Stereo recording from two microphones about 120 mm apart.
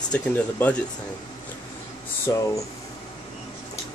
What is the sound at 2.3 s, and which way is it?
Speech, 30° left (ahead or behind).